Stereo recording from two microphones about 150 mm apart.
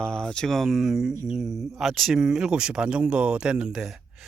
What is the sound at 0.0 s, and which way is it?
Speech, 5° left (ahead or behind).